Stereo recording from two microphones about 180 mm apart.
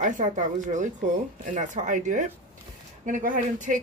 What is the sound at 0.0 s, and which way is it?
Speech, 45° right (ahead or behind).